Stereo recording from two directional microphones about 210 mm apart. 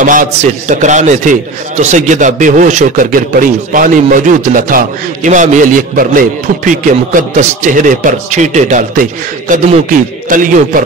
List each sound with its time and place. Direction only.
0.0 s a man's voice: 40° right (ahead or behind)